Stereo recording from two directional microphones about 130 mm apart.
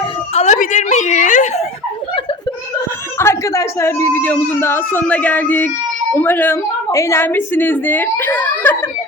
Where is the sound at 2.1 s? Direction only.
40° left (ahead or behind).